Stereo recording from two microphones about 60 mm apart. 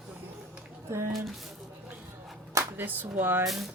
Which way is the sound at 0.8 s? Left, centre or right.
Right.